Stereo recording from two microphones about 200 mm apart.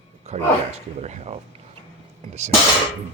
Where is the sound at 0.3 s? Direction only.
35° right (ahead or behind).